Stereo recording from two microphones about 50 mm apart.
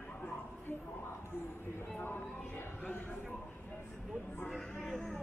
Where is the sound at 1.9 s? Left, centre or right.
Left.